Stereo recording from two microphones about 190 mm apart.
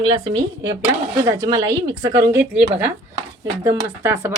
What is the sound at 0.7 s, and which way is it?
Speech, 15° right (ahead or behind).